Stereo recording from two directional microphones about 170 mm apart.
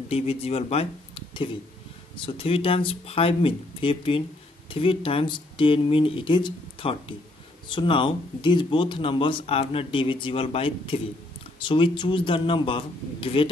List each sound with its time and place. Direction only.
0.1 s speech: 35° left (ahead or behind)
2.1 s speech: 30° left (ahead or behind)